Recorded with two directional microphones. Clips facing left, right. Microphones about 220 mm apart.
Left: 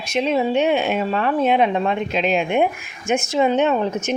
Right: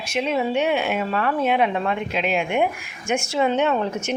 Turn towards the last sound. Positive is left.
turn(degrees=20)  # may be behind; listen again after turning